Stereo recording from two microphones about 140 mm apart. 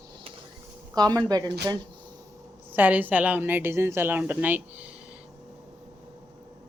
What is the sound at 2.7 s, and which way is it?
A woman's voice, 10° right (ahead or behind).